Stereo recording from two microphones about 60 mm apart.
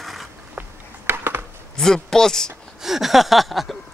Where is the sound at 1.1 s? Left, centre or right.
Right.